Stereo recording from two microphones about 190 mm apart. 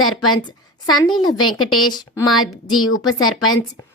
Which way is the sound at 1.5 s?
90° left.